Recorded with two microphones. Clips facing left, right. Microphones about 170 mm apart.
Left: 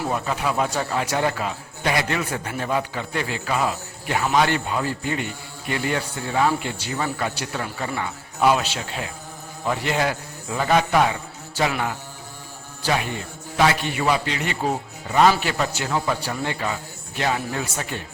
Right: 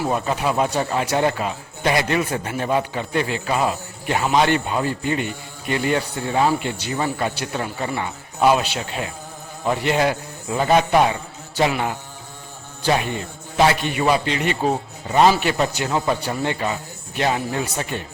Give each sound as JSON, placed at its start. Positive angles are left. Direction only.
{"t": 0.3, "sound": "a man's voice", "side_deg": -20}
{"t": 13.6, "sound": "a man's voice", "side_deg": -20}